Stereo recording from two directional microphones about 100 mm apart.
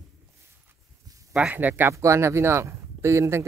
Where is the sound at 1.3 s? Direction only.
15° right (ahead or behind).